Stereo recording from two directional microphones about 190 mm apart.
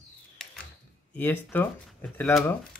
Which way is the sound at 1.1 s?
10° left (ahead or behind).